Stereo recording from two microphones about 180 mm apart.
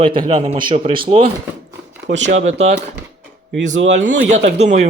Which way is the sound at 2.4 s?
35° right (ahead or behind).